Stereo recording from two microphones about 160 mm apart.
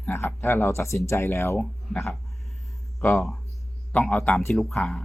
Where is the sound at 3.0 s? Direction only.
15° left (ahead or behind).